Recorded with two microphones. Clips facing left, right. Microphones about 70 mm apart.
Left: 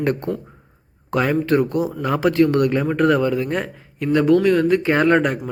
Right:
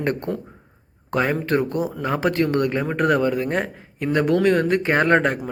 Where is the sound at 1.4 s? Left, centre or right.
Right.